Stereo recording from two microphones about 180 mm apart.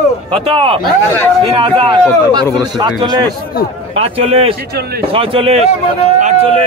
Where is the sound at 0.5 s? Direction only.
30° right (ahead or behind).